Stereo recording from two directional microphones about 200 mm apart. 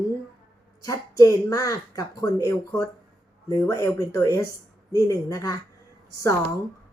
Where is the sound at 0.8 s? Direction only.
15° left (ahead or behind).